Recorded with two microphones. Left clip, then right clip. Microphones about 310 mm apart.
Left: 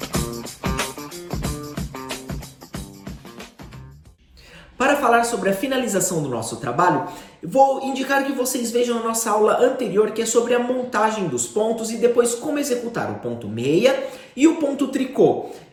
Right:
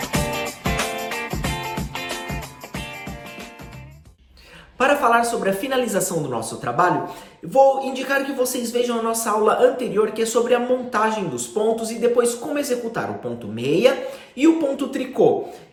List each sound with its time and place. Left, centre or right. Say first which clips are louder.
0.0 s music: right 5 dB; centre
4.8 s speech: even; centre